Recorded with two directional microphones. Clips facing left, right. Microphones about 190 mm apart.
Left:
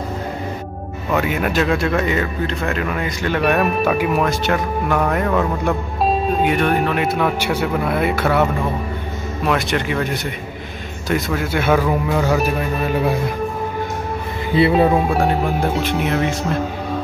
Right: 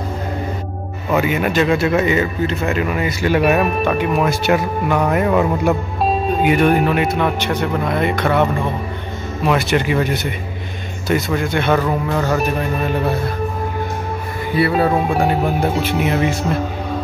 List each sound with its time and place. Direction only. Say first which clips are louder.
1.1 s speech: right 2 dB; centre (ahead or behind)
4.3 s speech: right 3 dB; 10° right (ahead or behind)
6.0 s speech: right 1 dB; centre (ahead or behind)
14.5 s speech: left 2 dB; 25° left (ahead or behind)
14.9 s speech: even; centre (ahead or behind)